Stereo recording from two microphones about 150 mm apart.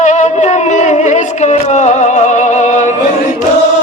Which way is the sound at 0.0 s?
55° left (ahead or behind).